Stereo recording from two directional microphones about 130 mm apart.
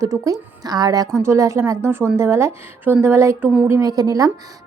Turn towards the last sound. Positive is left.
turn(degrees=-25)  # may be behind; listen again after turning